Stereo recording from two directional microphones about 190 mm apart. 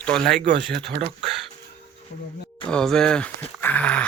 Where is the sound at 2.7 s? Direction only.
5° left (ahead or behind).